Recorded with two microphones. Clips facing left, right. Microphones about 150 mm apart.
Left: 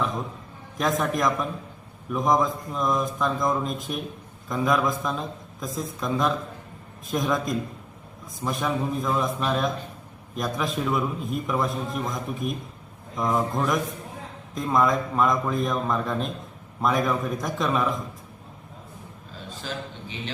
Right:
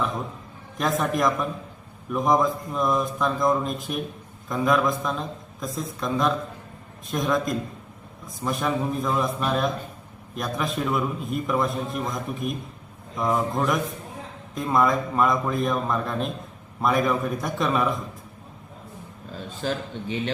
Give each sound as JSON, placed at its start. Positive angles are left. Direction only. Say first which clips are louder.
{"t": 0.8, "sound": "a man's voice", "louder": "right 1 dB", "side_deg": 0}
{"t": 19.6, "sound": "a man's voice", "louder": "right 7 dB", "side_deg": -45}